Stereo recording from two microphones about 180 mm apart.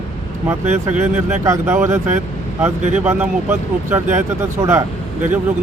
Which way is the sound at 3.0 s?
10° right (ahead or behind).